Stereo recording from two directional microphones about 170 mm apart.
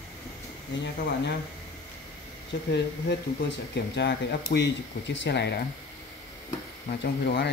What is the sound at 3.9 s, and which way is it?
Speech, 85° left.